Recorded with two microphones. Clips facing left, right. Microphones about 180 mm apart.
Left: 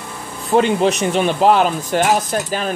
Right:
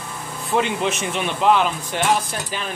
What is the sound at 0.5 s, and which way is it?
Speech, 35° left (ahead or behind).